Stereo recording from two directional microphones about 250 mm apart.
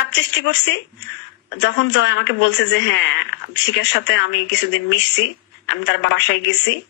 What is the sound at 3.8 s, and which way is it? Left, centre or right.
Speech, left.